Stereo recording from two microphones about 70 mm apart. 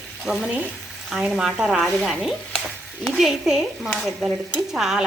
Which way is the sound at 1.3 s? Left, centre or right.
Centre.